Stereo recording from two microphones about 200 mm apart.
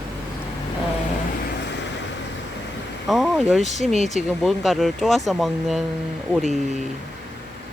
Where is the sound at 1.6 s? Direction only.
60° left (ahead or behind).